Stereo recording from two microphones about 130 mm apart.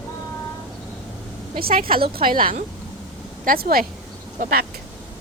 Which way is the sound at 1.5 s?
90° right.